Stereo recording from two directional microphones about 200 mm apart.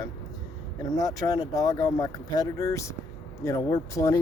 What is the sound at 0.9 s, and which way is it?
Speech, 20° left (ahead or behind).